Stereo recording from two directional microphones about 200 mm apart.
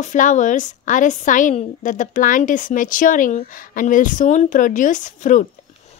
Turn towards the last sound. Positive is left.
turn(degrees=40)  # may be behind; listen again after turning